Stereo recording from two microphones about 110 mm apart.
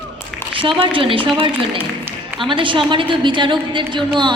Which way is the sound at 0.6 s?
55° right (ahead or behind).